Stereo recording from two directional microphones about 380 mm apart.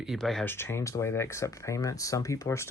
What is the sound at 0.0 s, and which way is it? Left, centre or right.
Speech, centre.